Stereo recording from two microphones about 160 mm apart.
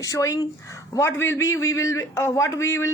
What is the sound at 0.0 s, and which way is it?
Speech, 20° left (ahead or behind).